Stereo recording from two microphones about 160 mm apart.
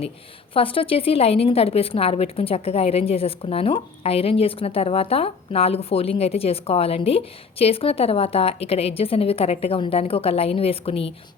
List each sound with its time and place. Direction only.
0.5 s a woman's voice: 35° left (ahead or behind)